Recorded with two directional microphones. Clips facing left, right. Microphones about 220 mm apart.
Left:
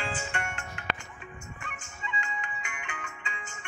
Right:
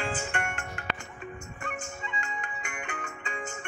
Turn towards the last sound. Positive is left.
turn(degrees=-50)  # may be behind; listen again after turning